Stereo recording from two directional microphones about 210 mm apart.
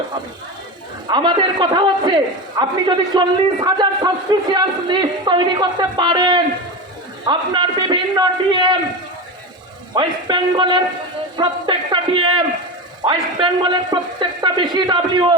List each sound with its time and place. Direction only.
1.1 s a man's voice: 20° right (ahead or behind)
9.9 s a man's voice: 20° right (ahead or behind)